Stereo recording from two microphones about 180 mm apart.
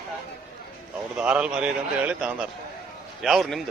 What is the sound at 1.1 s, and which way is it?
A man's voice, 5° right (ahead or behind).